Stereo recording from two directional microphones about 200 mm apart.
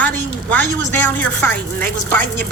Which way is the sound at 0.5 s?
10° left (ahead or behind).